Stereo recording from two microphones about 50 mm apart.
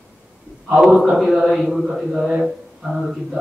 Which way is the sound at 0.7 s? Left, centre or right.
Centre.